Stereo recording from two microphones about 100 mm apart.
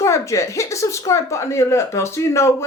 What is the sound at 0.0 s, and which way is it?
Speech, 30° left (ahead or behind).